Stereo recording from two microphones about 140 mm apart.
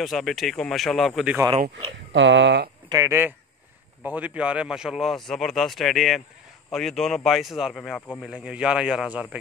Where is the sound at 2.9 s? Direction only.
20° right (ahead or behind).